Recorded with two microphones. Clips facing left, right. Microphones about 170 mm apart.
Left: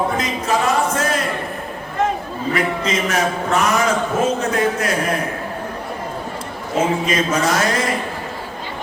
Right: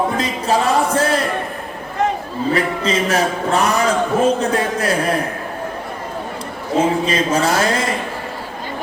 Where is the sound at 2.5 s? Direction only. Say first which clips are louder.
Right 1 dB; 30° right (ahead or behind).